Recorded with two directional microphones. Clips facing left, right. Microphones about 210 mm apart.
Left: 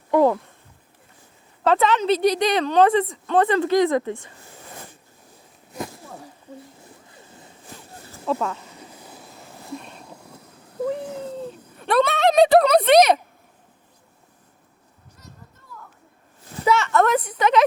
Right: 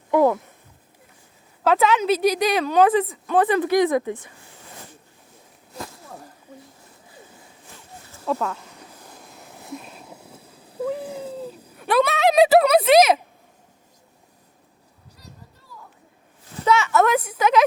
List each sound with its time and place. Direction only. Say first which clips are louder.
0.1 s speech: even; 5° right (ahead or behind)
1.6 s a woman's voice: even; 5° right (ahead or behind)
3.5 s speech: even; 15° right (ahead or behind)
6.1 s a sound: left 1 dB; 5° left (ahead or behind)
8.2 s a sound: even; centre (ahead or behind)
16.6 s a woman's voice: even; centre (ahead or behind)